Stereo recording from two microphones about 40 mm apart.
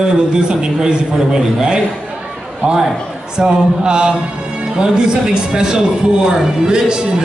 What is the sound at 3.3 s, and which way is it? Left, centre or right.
A man's voice, right.